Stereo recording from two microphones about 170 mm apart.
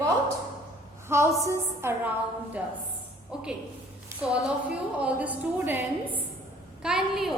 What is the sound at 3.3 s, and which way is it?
A woman's voice, 5° right (ahead or behind).